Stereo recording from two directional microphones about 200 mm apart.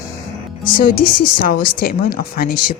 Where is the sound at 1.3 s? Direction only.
45° left (ahead or behind).